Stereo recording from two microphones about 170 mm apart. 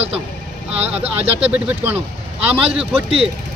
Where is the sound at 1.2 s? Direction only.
35° right (ahead or behind).